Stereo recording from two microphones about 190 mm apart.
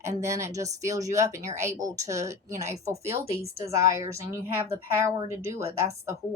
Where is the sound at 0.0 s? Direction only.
15° right (ahead or behind).